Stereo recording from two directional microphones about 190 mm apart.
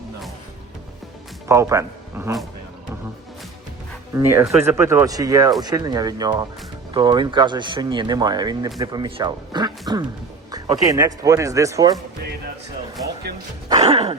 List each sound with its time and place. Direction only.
1.5 s speech: 15° right (ahead or behind)
4.1 s speech: 10° right (ahead or behind)
13.7 s music: 35° right (ahead or behind)